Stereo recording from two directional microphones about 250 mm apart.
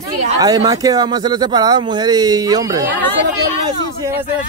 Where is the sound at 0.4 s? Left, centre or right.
Centre.